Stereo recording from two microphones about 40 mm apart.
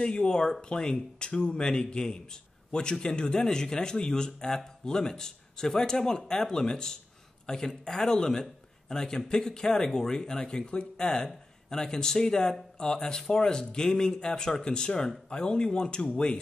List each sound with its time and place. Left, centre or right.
0.0 s a man's voice: left